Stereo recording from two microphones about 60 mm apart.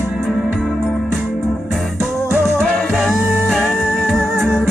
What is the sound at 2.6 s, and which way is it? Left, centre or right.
Music, centre.